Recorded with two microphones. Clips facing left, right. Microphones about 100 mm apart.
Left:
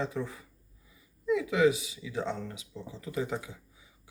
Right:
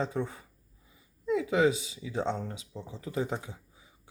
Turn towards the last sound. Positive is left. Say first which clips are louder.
# left 1 dB
turn(degrees=-30)  # may be behind; listen again after turning